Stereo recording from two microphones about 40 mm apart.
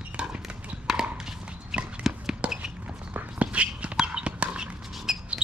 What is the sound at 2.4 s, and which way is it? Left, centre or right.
Basketball bounce, right.